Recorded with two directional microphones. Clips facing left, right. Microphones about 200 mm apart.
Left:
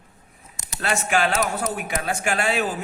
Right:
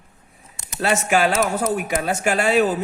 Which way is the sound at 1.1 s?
40° right (ahead or behind).